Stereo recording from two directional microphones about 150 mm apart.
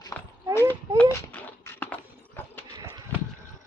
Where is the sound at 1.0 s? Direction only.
10° left (ahead or behind).